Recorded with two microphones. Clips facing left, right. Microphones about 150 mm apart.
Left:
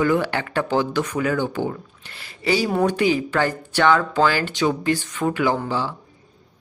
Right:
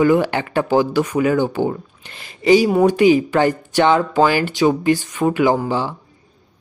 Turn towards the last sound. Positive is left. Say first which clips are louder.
# right 5 dB
turn(degrees=-15)  # may be behind; listen again after turning